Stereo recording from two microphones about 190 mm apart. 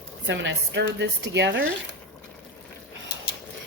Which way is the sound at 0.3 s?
70° right (ahead or behind).